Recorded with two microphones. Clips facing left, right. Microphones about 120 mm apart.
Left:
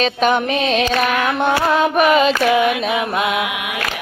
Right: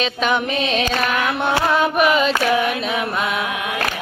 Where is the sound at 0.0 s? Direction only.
45° left (ahead or behind).